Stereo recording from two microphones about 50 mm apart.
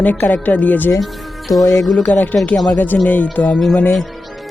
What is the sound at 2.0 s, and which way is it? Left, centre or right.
Speech, left.